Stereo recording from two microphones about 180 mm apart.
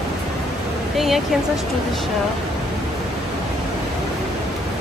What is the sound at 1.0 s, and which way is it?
Speech, centre (ahead or behind).